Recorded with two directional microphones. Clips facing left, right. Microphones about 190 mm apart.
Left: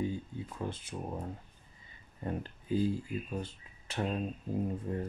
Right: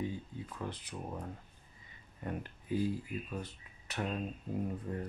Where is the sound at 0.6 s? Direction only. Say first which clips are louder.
Left 3 dB; 25° left (ahead or behind).